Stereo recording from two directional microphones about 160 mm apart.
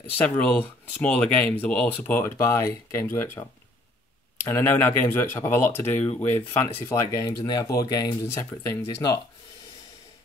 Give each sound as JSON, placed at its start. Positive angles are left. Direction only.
{"t": 0.2, "sound": "speech", "side_deg": 10}
{"t": 4.5, "sound": "speech", "side_deg": 15}